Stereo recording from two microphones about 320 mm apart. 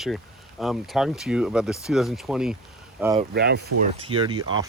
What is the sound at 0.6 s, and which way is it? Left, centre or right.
Speech, centre.